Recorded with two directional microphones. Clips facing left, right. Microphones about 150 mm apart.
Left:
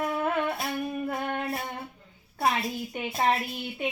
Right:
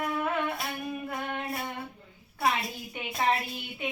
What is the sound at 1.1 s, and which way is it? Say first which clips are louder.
Child singing: left 4 dB; 40° left (ahead or behind).